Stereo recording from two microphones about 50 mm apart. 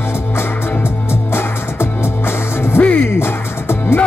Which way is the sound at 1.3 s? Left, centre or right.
Left.